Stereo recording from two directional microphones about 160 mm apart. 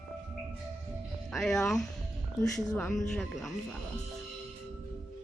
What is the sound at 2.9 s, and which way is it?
Speech, 5° left (ahead or behind).